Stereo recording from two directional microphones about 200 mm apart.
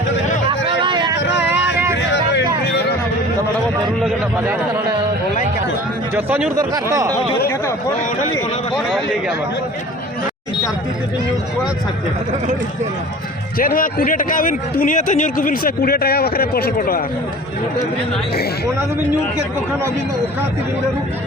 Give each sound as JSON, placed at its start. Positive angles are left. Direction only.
{"t": 0.7, "sound": "vehicle", "side_deg": -25}
{"t": 1.4, "sound": "vehicle", "side_deg": -10}
{"t": 4.0, "sound": "a sound", "side_deg": -10}
{"t": 6.1, "sound": "speech", "side_deg": -10}
{"t": 13.6, "sound": "a man's voice", "side_deg": 45}